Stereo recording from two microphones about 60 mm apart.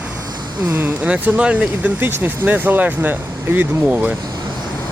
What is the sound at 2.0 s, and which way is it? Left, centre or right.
Speech, right.